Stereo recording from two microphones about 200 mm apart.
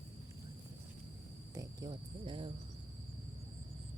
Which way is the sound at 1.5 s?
20° right (ahead or behind).